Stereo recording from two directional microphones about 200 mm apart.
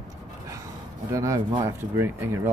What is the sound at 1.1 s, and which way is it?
Speech, 15° right (ahead or behind).